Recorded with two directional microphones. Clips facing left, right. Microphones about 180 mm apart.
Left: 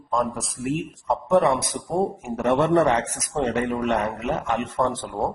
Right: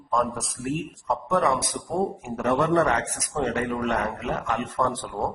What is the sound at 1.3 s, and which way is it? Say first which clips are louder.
A man's voice: left 4 dB; 25° left (ahead or behind).